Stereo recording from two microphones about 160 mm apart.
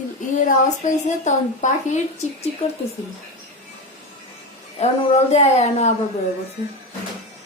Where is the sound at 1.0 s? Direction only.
50° left (ahead or behind).